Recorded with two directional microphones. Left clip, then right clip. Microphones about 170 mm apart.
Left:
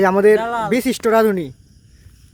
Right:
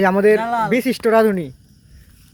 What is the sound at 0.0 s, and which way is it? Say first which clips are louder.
Speech: left 1 dB; 15° left (ahead or behind).